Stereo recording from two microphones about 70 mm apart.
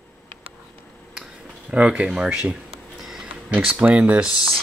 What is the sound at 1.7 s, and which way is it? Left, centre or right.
Speech, centre.